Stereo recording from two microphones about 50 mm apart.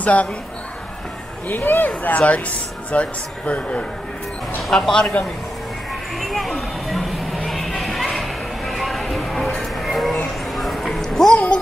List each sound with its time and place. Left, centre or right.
0.0 s speech: left
1.5 s speech: left
2.0 s speech: left
4.6 s speech: centre
6.1 s children playing: centre
7.4 s a sound: centre
9.6 s music: centre
10.5 s a sound: centre